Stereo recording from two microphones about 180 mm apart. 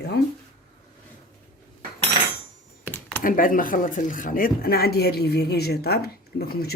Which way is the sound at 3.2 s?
50° left (ahead or behind).